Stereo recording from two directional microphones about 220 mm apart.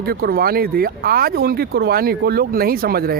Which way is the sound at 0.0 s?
45° right (ahead or behind).